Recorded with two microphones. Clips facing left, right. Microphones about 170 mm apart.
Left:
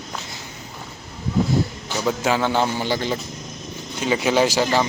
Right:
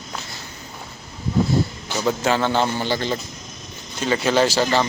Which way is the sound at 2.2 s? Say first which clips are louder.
Even; 10° left (ahead or behind).